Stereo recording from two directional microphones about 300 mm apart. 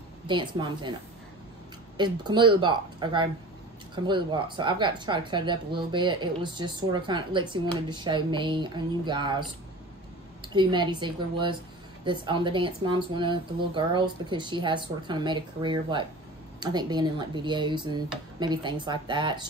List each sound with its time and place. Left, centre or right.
0.3 s speech: centre
2.0 s speech: centre
10.5 s speech: centre